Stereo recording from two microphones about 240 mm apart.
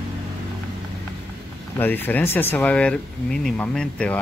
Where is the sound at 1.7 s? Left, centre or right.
Centre.